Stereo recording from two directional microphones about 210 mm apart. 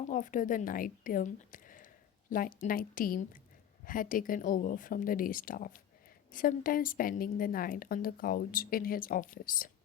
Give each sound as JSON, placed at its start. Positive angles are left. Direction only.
{"t": 0.0, "sound": "a woman's voice", "side_deg": 40}